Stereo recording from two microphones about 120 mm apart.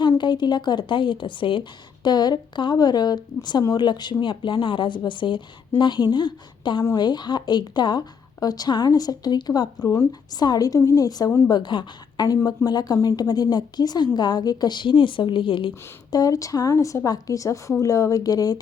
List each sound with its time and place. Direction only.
0.0 s a woman's voice: 40° left (ahead or behind)
9.8 s a woman's voice: 20° left (ahead or behind)
10.1 s a woman's voice: 35° left (ahead or behind)
16.1 s a woman's voice: 30° left (ahead or behind)